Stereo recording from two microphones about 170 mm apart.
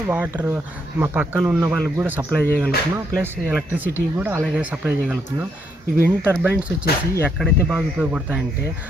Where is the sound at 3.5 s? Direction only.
10° right (ahead or behind).